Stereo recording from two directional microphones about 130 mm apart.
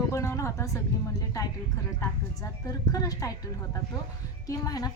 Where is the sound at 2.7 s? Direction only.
25° left (ahead or behind).